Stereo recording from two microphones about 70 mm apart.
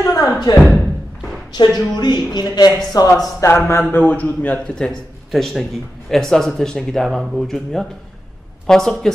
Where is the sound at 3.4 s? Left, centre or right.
Left.